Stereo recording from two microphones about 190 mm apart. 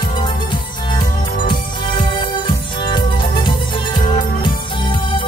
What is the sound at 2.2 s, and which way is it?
Music, 25° left (ahead or behind).